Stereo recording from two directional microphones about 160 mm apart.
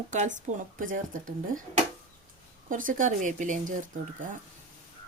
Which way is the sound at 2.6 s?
55° right (ahead or behind).